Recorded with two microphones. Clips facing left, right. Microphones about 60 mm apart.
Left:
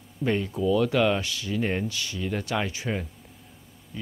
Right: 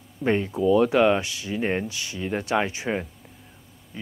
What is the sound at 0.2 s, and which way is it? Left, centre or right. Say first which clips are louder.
Speech: right 3 dB; right.